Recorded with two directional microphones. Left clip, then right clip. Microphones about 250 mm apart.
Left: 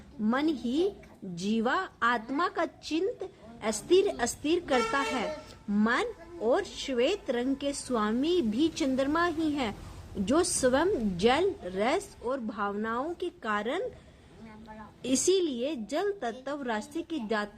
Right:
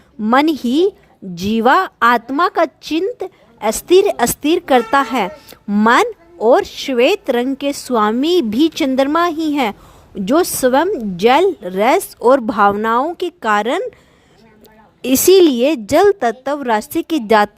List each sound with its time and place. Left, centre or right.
0.2 s a woman's voice: right
15.0 s a woman's voice: right